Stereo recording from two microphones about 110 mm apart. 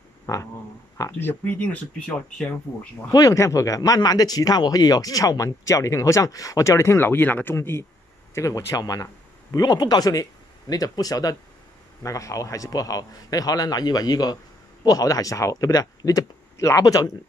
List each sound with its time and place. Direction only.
0.3 s a sound: 30° left (ahead or behind)
1.2 s speech: 15° left (ahead or behind)
3.1 s a man's voice: 30° left (ahead or behind)